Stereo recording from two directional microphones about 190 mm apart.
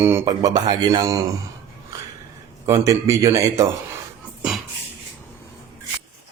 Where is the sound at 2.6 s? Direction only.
15° right (ahead or behind).